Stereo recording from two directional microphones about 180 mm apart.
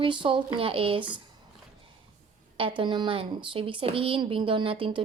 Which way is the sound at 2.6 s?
30° right (ahead or behind).